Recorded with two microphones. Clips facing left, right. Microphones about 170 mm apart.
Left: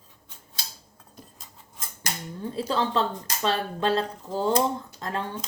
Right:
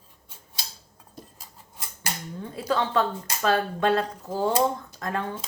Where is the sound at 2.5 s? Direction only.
30° left (ahead or behind).